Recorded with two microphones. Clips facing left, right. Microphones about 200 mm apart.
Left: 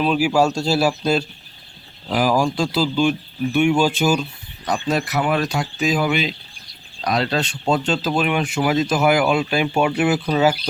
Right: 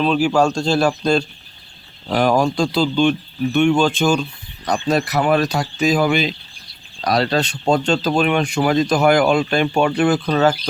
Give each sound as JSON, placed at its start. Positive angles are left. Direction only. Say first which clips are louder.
{"t": 0.0, "sound": "speech", "louder": "right 1 dB", "side_deg": 10}
{"t": 5.0, "sound": "speech", "louder": "right 4 dB", "side_deg": -40}
{"t": 8.4, "sound": "speech", "louder": "right 2 dB", "side_deg": 5}